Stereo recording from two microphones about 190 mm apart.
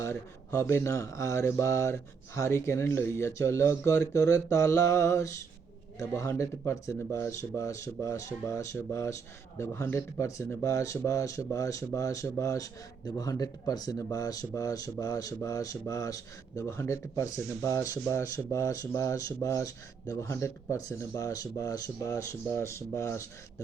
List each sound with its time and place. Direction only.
0.0 s speech: 15° left (ahead or behind)